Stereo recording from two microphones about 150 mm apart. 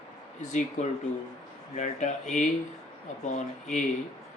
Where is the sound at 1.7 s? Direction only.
50° left (ahead or behind).